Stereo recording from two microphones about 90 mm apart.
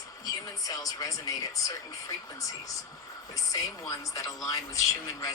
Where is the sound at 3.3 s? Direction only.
40° left (ahead or behind).